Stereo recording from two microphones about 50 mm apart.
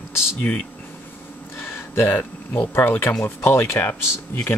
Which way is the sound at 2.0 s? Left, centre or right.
Left.